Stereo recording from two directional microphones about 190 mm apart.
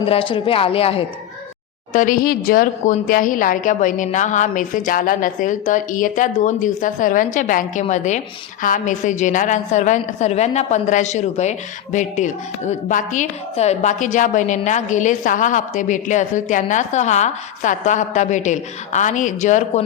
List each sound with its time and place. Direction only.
0.1 s speech: 30° left (ahead or behind)
1.9 s a woman's voice: 45° left (ahead or behind)